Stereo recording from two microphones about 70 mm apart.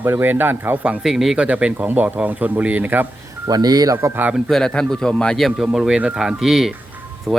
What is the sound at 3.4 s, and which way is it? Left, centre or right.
Speech, right.